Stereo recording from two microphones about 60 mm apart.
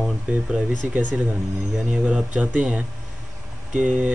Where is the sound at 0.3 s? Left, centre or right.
Right.